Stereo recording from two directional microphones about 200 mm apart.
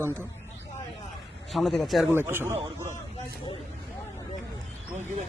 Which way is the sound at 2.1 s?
10° right (ahead or behind).